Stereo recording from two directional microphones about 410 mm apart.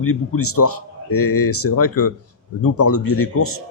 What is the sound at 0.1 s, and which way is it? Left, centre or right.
Speech, left.